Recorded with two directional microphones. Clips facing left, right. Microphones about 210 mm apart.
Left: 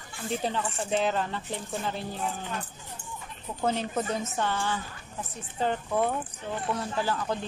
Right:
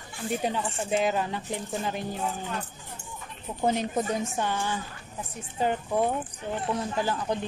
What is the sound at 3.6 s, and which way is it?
A woman's voice, 15° right (ahead or behind).